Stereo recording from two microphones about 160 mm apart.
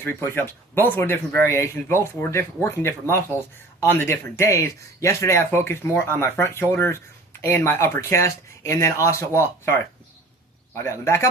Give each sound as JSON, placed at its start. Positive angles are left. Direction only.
{"t": 0.0, "sound": "speech", "side_deg": 15}
{"t": 10.8, "sound": "speech", "side_deg": 15}